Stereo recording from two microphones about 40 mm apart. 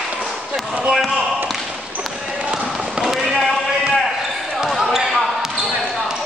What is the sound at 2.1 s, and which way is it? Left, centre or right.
Basketball bounce, centre.